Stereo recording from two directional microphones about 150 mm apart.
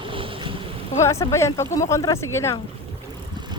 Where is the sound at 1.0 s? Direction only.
20° left (ahead or behind).